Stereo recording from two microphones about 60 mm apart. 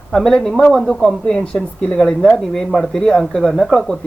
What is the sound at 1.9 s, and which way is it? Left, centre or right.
Speech, centre.